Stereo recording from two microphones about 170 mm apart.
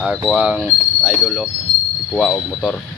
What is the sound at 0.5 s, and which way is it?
Speech, 5° left (ahead or behind).